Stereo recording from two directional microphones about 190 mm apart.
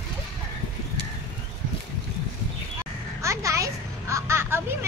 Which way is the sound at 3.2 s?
15° right (ahead or behind).